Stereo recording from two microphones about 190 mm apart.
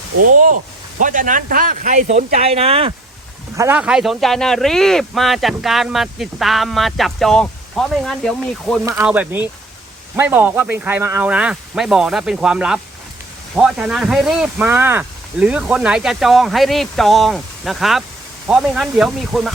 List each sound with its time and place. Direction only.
0.3 s speech: 45° right (ahead or behind)
3.6 s a man's voice: 10° right (ahead or behind)